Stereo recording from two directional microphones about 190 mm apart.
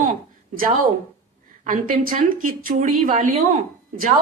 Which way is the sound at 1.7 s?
45° right (ahead or behind).